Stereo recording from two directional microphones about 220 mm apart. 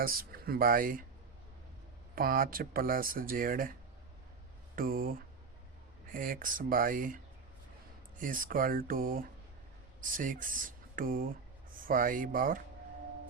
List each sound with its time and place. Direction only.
0.0 s speech: 40° right (ahead or behind)
2.1 s speech: 40° right (ahead or behind)
8.2 s speech: 40° right (ahead or behind)